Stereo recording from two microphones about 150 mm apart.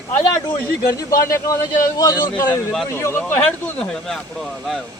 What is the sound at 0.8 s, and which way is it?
Speech, 70° left (ahead or behind).